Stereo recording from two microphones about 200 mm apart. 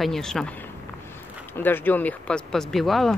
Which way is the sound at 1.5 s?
10° left (ahead or behind).